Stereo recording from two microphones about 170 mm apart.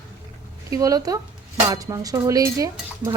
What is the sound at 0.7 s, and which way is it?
Cutlery, 20° right (ahead or behind).